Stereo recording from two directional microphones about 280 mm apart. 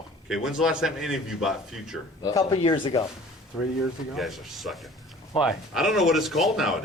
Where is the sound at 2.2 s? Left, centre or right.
Centre.